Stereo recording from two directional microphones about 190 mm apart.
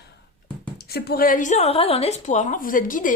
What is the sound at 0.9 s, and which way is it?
A woman's voice, 55° left (ahead or behind).